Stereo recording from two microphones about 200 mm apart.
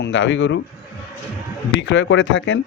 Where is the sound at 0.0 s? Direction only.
65° left (ahead or behind).